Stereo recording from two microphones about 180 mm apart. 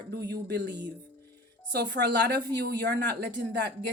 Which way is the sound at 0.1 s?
65° right (ahead or behind).